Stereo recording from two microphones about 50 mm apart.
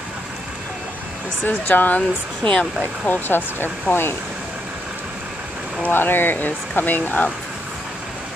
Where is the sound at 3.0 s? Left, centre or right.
Left.